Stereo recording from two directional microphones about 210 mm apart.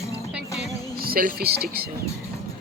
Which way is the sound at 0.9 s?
45° right (ahead or behind).